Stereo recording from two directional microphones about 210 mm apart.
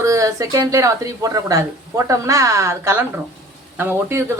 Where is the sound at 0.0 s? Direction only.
15° right (ahead or behind).